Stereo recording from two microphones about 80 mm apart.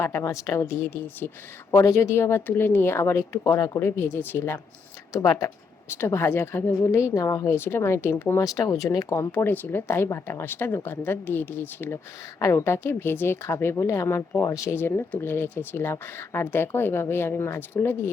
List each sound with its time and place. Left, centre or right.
0.0 s speech: left
5.9 s speech: left
8.4 s speech: left
9.3 s speech: left
12.4 s speech: left
14.8 s speech: left